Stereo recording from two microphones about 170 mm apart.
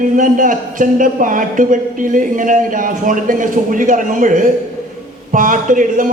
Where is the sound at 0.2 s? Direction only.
50° right (ahead or behind).